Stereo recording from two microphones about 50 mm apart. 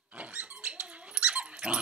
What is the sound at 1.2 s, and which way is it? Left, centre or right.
Dog, centre.